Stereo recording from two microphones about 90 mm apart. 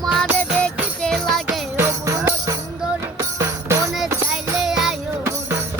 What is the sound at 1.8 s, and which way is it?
Music, 30° right (ahead or behind).